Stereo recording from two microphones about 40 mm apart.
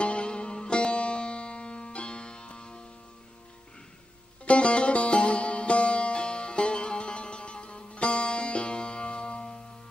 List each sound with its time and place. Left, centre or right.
0.0 s music: left
4.5 s music: left